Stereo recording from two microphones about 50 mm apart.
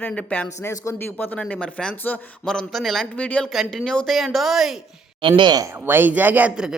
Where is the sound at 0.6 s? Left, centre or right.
Left.